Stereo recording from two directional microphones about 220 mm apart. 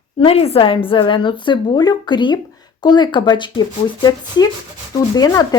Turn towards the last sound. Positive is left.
turn(degrees=15)  # may be behind; listen again after turning